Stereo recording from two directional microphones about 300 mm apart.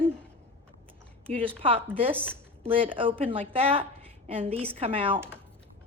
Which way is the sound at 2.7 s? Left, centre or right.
Centre.